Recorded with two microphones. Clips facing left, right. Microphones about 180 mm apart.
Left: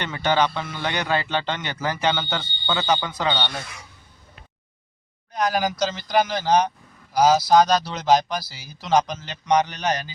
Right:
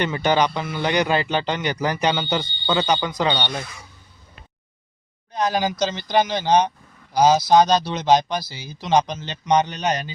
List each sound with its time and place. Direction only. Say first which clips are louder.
0.0 s a man's voice: right 2 dB; 15° right (ahead or behind)
5.3 s speech: right 1 dB; 25° right (ahead or behind)